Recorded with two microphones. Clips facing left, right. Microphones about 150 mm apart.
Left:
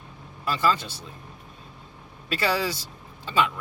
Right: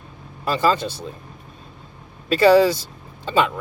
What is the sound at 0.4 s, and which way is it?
Speech, 25° right (ahead or behind).